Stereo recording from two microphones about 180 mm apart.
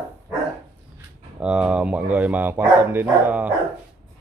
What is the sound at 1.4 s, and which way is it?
Speech, 5° right (ahead or behind).